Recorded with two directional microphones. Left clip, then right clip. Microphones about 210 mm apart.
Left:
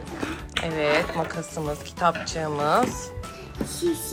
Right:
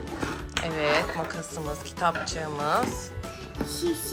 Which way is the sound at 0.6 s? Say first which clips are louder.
Left 2 dB; 10° right (ahead or behind).